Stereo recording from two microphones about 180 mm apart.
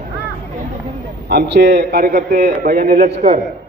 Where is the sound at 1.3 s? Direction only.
70° right (ahead or behind).